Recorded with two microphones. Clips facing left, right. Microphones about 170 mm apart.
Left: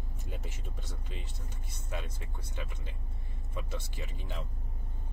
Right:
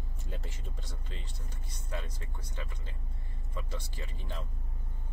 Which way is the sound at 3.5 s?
20° left (ahead or behind).